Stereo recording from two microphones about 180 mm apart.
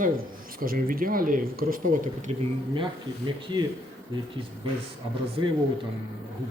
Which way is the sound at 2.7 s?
25° right (ahead or behind).